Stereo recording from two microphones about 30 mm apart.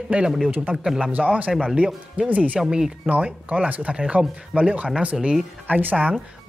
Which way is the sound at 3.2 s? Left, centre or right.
Right.